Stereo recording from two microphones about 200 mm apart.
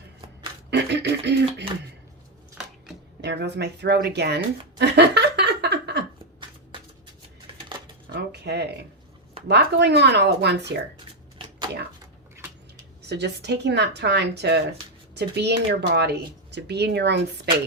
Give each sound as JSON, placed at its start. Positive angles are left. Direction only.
{"t": 0.7, "sound": "speech", "side_deg": -60}
{"t": 3.2, "sound": "speech", "side_deg": -60}
{"t": 8.1, "sound": "a sound", "side_deg": -55}
{"t": 9.5, "sound": "a woman's voice", "side_deg": -55}
{"t": 13.1, "sound": "a woman's voice", "side_deg": -55}